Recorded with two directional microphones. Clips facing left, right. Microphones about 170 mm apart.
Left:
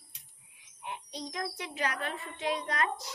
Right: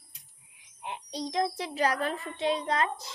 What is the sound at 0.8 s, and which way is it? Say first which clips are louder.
A child's voice: right 5 dB; 25° right (ahead or behind).